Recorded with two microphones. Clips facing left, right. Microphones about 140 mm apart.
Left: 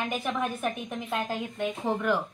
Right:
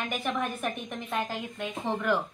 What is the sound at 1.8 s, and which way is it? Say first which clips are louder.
Speech: even; 10° left (ahead or behind).